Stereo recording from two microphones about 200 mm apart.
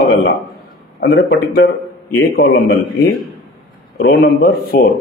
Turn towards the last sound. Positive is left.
turn(degrees=50)  # may be behind; listen again after turning